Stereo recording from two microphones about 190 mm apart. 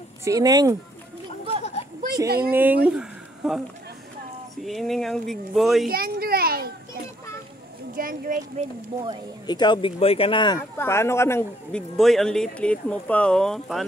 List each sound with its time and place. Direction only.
0.2 s speech: 20° right (ahead or behind)
2.2 s speech: 55° right (ahead or behind)
2.5 s speech: 10° right (ahead or behind)
4.6 s speech: centre (ahead or behind)
5.9 s a sound: 50° right (ahead or behind)
7.9 s speech: 45° right (ahead or behind)
9.5 s speech: 25° left (ahead or behind)
10.8 s a man's voice: 15° left (ahead or behind)
12.0 s speech: centre (ahead or behind)